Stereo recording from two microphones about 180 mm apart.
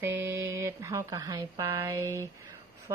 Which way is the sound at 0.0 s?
15° right (ahead or behind).